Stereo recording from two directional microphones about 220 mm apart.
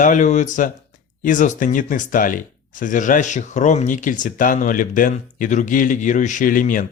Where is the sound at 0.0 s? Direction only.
35° left (ahead or behind).